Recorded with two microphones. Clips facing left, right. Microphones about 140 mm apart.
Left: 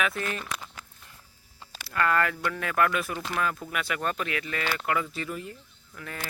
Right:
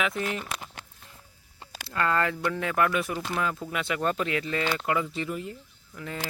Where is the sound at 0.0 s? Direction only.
20° right (ahead or behind).